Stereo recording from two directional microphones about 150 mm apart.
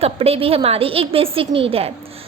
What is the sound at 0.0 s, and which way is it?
A woman's voice, 40° right (ahead or behind).